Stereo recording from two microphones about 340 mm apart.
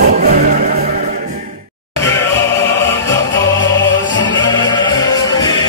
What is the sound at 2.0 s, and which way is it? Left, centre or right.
Music, centre.